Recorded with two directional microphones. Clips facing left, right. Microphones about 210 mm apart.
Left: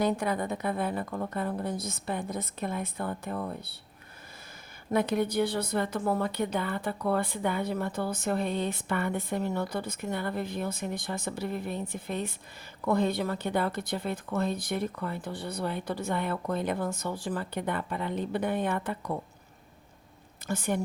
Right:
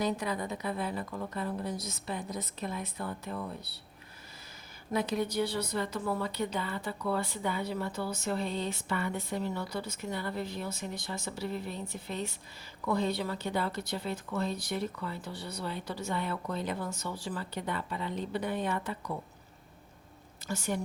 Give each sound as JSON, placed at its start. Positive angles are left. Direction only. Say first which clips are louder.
{"t": 0.0, "sound": "a woman's voice", "louder": "left 4 dB", "side_deg": 55}
{"t": 4.9, "sound": "a woman's voice", "louder": "left 4 dB", "side_deg": 55}
{"t": 20.5, "sound": "a woman's voice", "louder": "left 4 dB", "side_deg": 55}